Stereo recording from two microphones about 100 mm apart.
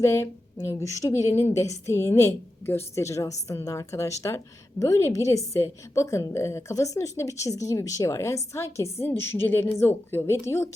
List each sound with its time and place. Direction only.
0.0 s a woman's voice: 30° left (ahead or behind)